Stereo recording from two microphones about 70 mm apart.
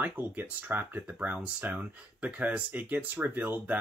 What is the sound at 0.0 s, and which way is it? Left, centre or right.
Speech, right.